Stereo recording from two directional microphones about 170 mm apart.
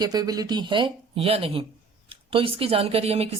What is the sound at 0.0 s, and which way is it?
A woman's voice, 25° right (ahead or behind).